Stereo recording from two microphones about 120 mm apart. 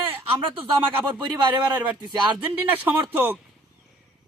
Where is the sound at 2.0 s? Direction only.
35° right (ahead or behind).